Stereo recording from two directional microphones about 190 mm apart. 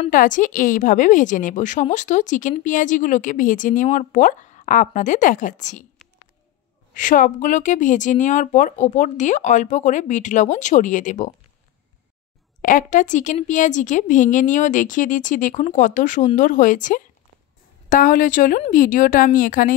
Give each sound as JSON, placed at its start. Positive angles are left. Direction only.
{"t": 0.1, "sound": "speech", "side_deg": 45}
{"t": 6.9, "sound": "a woman's voice", "side_deg": 45}
{"t": 12.6, "sound": "a woman's voice", "side_deg": 45}